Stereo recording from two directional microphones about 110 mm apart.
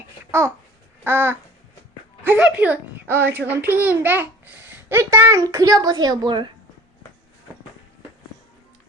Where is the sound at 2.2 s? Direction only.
15° right (ahead or behind); by 6.5 s 40° right (ahead or behind).